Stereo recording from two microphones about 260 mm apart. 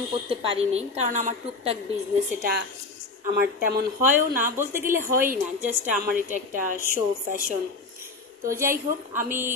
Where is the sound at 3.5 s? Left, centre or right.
Right.